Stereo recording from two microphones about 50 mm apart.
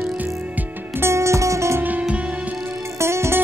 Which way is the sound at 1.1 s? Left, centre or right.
Right.